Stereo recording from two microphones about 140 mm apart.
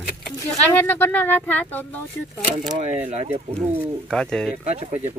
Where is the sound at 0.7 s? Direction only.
15° left (ahead or behind).